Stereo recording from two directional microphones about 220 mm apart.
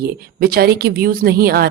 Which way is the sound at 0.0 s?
45° right (ahead or behind).